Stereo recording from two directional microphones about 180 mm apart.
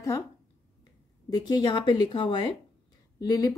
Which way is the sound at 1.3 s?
20° left (ahead or behind).